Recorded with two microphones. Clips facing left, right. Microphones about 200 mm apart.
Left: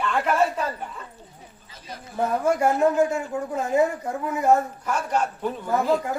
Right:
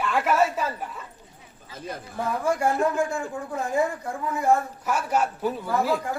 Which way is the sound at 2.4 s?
25° left (ahead or behind).